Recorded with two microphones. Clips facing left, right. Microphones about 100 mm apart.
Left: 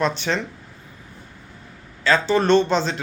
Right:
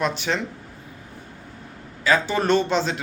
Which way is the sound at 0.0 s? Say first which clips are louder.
Left 2 dB; 5° right (ahead or behind).